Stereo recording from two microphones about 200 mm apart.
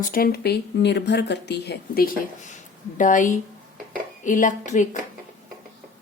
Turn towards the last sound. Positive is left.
turn(degrees=40)  # may be behind; listen again after turning